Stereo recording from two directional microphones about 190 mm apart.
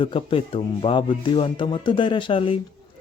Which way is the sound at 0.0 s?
25° left (ahead or behind).